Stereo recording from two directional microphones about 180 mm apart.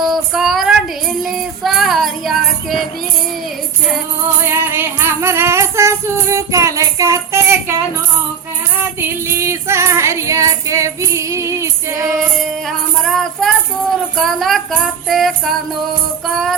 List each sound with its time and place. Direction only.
0.0 s a sound: centre (ahead or behind)
1.2 s child singing: centre (ahead or behind)
4.4 s music: 10° right (ahead or behind)
9.0 s female singing: 15° right (ahead or behind)
12.4 s music: centre (ahead or behind)